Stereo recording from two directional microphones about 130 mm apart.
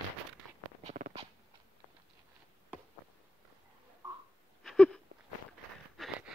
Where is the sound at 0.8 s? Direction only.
75° right (ahead or behind).